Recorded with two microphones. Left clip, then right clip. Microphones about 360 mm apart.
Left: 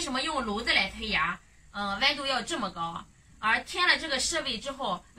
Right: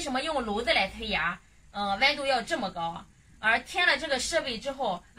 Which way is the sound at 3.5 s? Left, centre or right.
Centre.